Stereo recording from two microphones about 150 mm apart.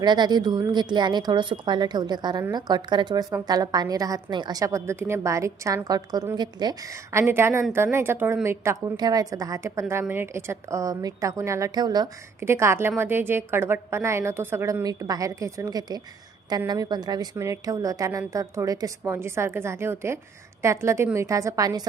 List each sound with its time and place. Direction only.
0.0 s a woman's voice: 30° right (ahead or behind)